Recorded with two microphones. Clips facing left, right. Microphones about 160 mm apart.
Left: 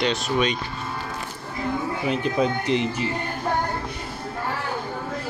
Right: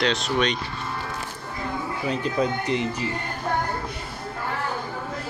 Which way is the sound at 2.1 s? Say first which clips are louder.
Left 1 dB; 15° left (ahead or behind).